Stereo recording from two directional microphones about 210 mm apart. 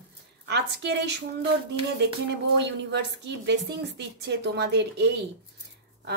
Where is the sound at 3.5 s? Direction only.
55° right (ahead or behind).